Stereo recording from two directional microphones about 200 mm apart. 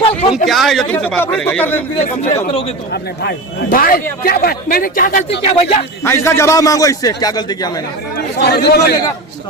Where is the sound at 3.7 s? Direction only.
45° left (ahead or behind).